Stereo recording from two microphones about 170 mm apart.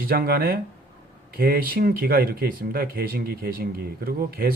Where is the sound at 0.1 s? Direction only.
60° right (ahead or behind).